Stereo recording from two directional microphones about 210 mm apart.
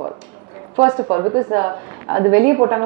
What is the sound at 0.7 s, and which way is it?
A woman's voice, 20° right (ahead or behind).